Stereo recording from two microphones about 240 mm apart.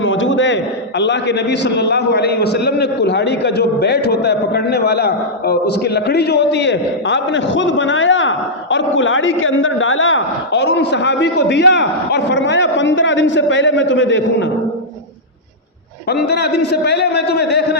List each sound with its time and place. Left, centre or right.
0.0 s a man's voice: left
16.0 s a man's voice: left